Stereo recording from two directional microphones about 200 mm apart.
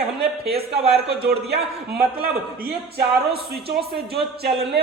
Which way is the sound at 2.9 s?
50° right (ahead or behind).